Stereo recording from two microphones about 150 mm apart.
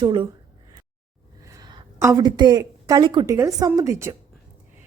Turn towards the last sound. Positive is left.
turn(degrees=-20)  # may be behind; listen again after turning